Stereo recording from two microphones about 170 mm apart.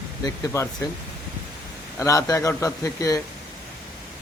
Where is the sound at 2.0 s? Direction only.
20° left (ahead or behind).